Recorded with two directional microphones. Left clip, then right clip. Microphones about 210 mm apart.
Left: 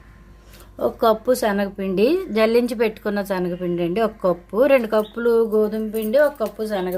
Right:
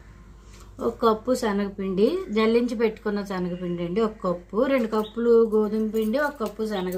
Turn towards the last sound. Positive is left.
turn(degrees=50)  # may be behind; listen again after turning